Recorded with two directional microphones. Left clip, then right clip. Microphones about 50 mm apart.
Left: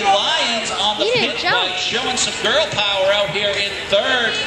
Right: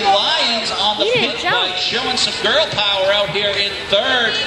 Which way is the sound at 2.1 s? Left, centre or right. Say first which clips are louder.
Right 2 dB; centre.